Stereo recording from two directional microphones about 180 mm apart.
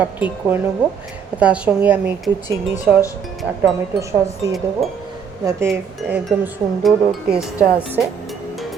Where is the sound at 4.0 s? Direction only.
15° right (ahead or behind).